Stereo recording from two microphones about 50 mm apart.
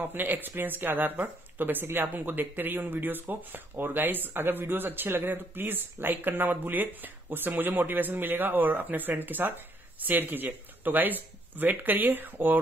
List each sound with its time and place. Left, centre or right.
0.0 s speech: right